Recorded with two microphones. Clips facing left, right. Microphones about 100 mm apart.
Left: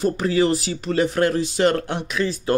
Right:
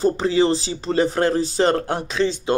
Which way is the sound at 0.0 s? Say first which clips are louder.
Right 2 dB; 30° right (ahead or behind).